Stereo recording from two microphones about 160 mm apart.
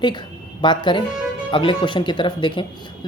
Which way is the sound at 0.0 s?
30° left (ahead or behind).